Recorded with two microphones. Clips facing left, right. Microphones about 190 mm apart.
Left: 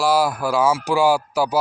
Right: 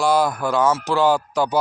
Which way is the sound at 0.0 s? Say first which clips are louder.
Even; 5° left (ahead or behind).